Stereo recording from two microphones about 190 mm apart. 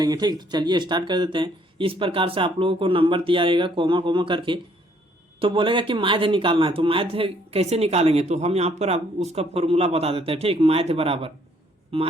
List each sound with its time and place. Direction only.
0.0 s speech: 20° right (ahead or behind)